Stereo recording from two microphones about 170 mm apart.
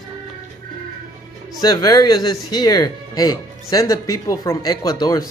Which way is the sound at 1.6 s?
25° left (ahead or behind).